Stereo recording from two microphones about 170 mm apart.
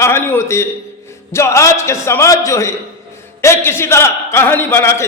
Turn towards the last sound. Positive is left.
turn(degrees=15)  # may be behind; listen again after turning